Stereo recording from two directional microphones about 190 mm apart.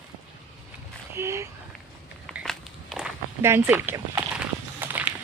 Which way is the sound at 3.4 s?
10° right (ahead or behind).